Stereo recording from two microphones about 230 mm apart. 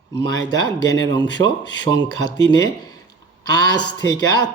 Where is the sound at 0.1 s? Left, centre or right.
Centre.